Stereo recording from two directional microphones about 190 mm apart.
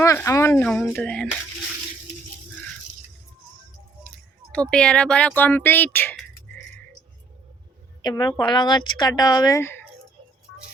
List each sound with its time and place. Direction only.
0.0 s a woman's voice: 15° left (ahead or behind)
4.7 s a woman's voice: 5° left (ahead or behind)
8.0 s a woman's voice: 20° left (ahead or behind)